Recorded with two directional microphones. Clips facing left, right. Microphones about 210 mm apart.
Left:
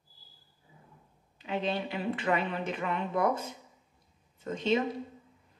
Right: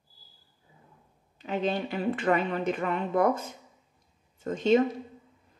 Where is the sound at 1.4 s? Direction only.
45° right (ahead or behind).